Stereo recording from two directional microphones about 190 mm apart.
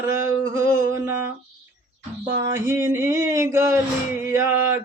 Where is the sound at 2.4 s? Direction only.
15° right (ahead or behind).